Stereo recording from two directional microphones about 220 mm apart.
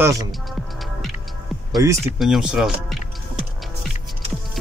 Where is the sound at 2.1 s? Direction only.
Centre (ahead or behind).